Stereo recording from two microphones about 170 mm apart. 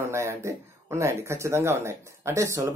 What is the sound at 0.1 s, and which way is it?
Speech, 15° right (ahead or behind).